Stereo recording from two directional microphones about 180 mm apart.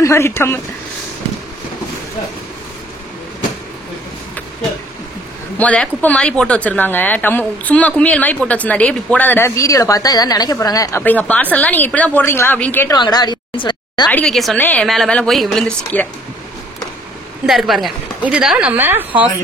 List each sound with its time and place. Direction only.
0.0 s speech: 15° left (ahead or behind)
5.6 s speech: 10° left (ahead or behind)
12.9 s a woman's voice: 25° left (ahead or behind)
14.0 s speech: 5° left (ahead or behind)
17.5 s speech: centre (ahead or behind)